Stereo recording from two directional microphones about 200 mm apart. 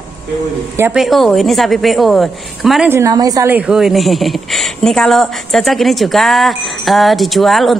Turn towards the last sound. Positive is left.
turn(degrees=0)  # may be behind; listen again after turning